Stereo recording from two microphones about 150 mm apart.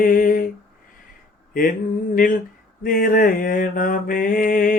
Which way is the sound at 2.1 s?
65° left (ahead or behind).